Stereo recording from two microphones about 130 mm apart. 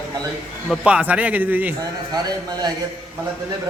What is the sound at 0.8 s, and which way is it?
Speech, 10° right (ahead or behind).